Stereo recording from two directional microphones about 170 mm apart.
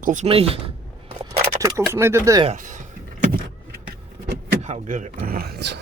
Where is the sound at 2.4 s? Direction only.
50° right (ahead or behind).